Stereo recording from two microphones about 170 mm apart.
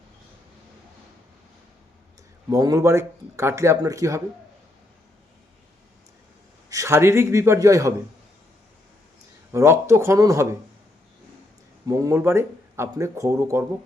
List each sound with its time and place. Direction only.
2.5 s speech: 20° right (ahead or behind)
6.7 s speech: 20° right (ahead or behind)
9.5 s speech: 15° right (ahead or behind)
11.9 s speech: 20° right (ahead or behind)